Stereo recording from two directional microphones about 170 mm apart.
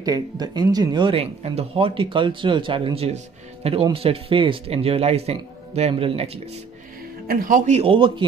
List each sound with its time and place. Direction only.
0.0 s speech: 20° right (ahead or behind)
7.2 s a man's voice: 55° right (ahead or behind); by 8.1 s 30° right (ahead or behind)